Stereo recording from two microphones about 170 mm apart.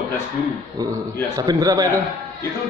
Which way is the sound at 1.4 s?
20° right (ahead or behind).